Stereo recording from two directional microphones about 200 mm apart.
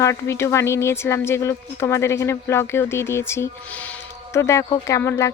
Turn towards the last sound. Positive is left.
turn(degrees=15)  # may be behind; listen again after turning